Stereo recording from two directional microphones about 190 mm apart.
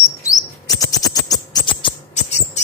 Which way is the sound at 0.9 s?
20° left (ahead or behind).